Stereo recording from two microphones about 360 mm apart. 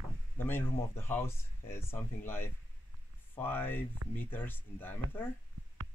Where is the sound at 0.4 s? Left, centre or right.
Centre.